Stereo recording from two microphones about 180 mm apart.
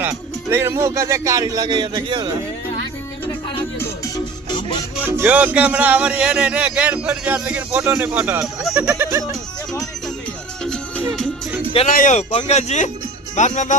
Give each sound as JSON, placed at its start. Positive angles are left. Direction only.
{"t": 0.5, "sound": "a man's voice", "side_deg": -15}
{"t": 3.8, "sound": "music", "side_deg": 15}
{"t": 5.0, "sound": "speech", "side_deg": -10}
{"t": 8.9, "sound": "speech", "side_deg": -15}
{"t": 10.6, "sound": "music", "side_deg": 5}
{"t": 11.9, "sound": "speech", "side_deg": 45}